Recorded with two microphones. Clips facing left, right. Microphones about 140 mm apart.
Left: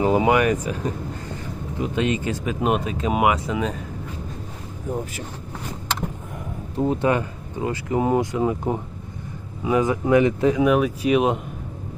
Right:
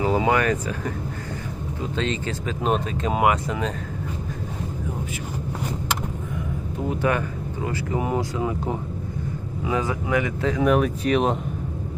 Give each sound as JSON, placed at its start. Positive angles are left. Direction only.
{"t": 0.0, "sound": "speech", "side_deg": 20}
{"t": 6.7, "sound": "speech", "side_deg": 25}
{"t": 10.6, "sound": "speech", "side_deg": 5}